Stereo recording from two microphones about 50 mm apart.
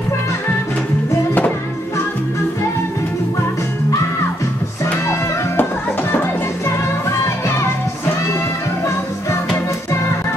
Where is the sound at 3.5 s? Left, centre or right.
Left.